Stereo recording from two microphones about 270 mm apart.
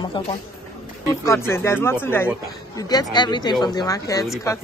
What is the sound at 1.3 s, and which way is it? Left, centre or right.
Speech, centre.